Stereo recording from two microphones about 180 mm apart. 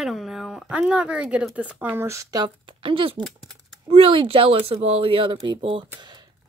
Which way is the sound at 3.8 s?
30° right (ahead or behind).